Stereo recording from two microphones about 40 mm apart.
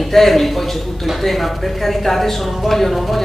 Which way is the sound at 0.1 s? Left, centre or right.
Centre.